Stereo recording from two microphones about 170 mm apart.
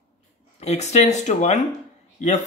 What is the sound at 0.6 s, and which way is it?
Speech, 40° left (ahead or behind).